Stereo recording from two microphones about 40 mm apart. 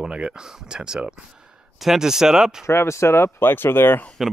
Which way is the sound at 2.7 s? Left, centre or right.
Left.